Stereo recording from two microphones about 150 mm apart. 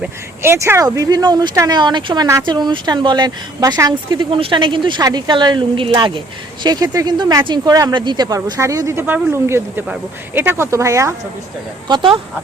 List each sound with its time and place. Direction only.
0.0 s speech: 15° right (ahead or behind)
11.9 s speech: 30° right (ahead or behind)